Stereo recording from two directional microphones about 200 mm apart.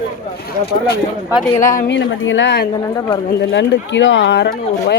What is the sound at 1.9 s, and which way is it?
Speech, 65° left (ahead or behind).